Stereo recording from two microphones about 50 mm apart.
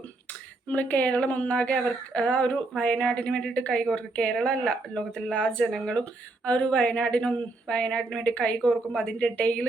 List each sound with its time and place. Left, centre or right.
0.7 s speech: left